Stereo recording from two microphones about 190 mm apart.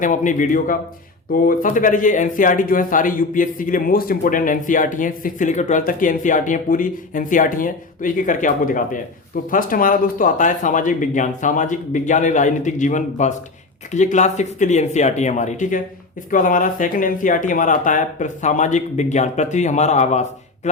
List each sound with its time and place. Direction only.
0.0 s speech: 40° left (ahead or behind)